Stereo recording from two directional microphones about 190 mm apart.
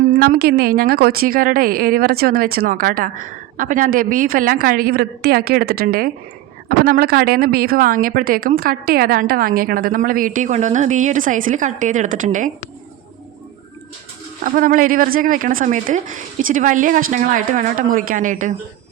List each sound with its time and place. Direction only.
0.0 s a woman's voice: 50° right (ahead or behind)
14.4 s a woman's voice: 45° right (ahead or behind)